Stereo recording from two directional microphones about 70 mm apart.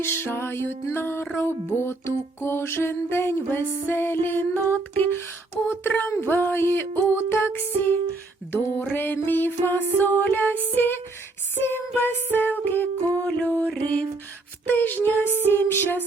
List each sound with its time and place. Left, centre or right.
0.0 s music: left
13.2 s music: centre
14.7 s music: left